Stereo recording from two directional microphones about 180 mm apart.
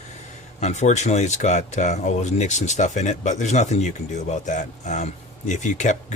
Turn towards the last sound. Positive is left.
turn(degrees=40)  # may be behind; listen again after turning